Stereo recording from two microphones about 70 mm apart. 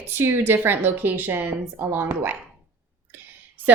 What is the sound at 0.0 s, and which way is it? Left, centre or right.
A woman's voice, right.